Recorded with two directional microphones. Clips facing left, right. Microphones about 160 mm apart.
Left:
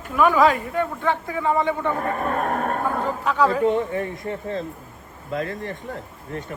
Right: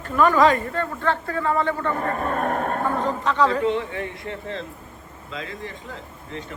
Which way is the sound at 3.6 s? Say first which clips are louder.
Left 3 dB; 45° left (ahead or behind).